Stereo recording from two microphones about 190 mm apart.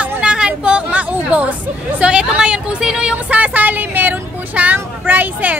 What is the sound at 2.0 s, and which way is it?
A woman's voice, 5° right (ahead or behind).